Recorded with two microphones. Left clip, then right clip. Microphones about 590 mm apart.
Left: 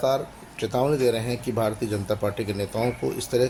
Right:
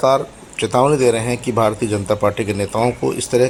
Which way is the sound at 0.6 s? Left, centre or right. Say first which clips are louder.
Right 8 dB; left.